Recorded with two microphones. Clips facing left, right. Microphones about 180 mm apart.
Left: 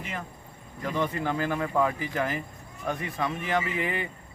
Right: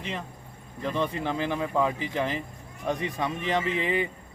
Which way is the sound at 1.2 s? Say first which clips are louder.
Even; 20° right (ahead or behind).